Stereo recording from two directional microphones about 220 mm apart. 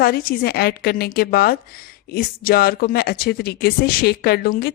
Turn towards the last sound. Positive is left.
turn(degrees=45)  # may be behind; listen again after turning